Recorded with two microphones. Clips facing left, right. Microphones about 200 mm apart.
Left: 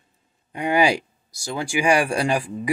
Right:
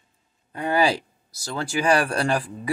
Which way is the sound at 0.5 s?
15° left (ahead or behind).